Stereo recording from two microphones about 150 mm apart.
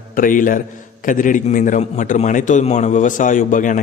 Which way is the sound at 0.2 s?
65° left (ahead or behind).